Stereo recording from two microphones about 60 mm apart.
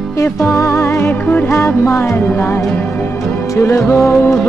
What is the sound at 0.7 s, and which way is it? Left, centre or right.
Music, left.